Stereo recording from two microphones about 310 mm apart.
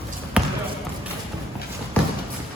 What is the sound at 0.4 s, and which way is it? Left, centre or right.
Basketball bounce, centre.